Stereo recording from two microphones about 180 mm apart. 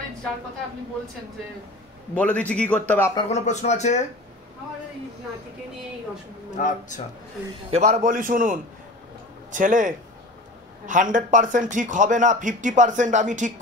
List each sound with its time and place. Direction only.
2.1 s a man's voice: 10° left (ahead or behind)
3.2 s speech: 35° left (ahead or behind)
6.5 s speech: 45° left (ahead or behind)
7.7 s speech: 40° right (ahead or behind)